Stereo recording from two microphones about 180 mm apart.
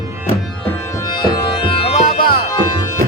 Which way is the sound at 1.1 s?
25° left (ahead or behind).